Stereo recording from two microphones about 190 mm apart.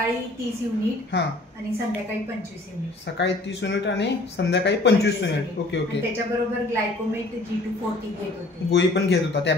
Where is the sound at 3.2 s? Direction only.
70° left (ahead or behind).